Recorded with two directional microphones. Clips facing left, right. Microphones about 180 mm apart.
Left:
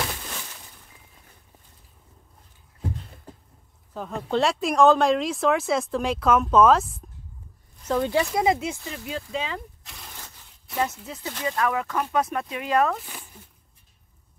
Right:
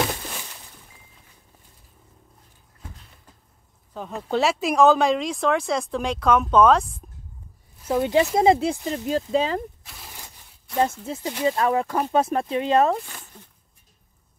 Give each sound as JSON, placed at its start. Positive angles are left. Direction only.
{"t": 3.9, "sound": "speech", "side_deg": 0}
{"t": 7.8, "sound": "speech", "side_deg": -15}
{"t": 9.8, "sound": "a sound", "side_deg": -5}
{"t": 10.8, "sound": "speech", "side_deg": -30}
{"t": 13.0, "sound": "zipper", "side_deg": 10}